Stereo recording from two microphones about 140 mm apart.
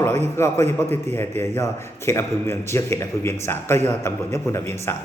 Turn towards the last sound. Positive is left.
turn(degrees=20)  # may be behind; listen again after turning